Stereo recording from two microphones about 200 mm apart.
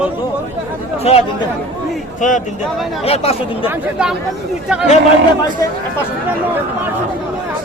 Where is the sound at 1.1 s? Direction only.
30° left (ahead or behind).